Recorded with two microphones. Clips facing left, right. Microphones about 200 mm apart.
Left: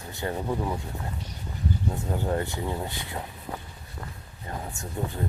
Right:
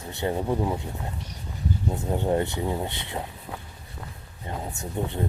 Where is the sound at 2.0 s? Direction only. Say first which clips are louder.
Right 5 dB; 25° right (ahead or behind).